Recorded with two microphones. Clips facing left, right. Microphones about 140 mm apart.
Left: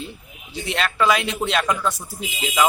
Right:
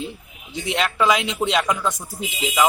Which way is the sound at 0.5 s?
15° right (ahead or behind).